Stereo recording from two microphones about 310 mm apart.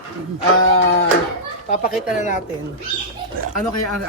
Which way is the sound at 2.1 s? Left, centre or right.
Left.